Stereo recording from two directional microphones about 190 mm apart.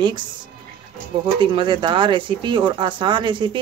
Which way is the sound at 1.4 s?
25° right (ahead or behind).